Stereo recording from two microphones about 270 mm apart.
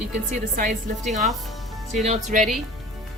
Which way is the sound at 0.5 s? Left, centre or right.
Right.